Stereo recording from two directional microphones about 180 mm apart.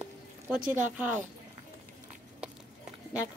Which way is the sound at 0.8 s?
10° right (ahead or behind).